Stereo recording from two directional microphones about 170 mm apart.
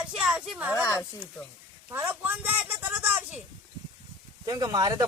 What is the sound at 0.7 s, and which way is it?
Speech, 15° left (ahead or behind).